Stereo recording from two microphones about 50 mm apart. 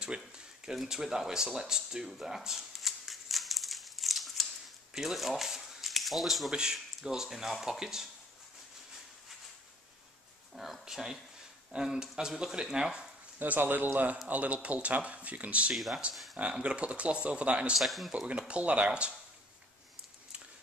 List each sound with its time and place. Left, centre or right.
0.0 s a sound: centre
6.5 s speech: centre
10.5 s speech: centre
13.4 s a man's voice: right
15.7 s a man's voice: centre
16.3 s speech: right
17.7 s a man's voice: centre
18.1 s speech: right